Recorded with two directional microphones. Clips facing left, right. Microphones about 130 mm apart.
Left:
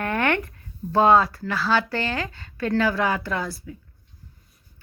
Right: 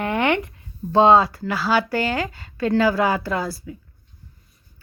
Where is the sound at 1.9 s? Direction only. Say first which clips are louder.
Right 4 dB; 15° right (ahead or behind); by 3.6 s 30° right (ahead or behind).